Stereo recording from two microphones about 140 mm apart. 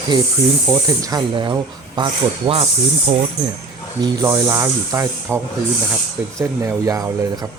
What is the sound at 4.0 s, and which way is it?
Speech, 25° right (ahead or behind).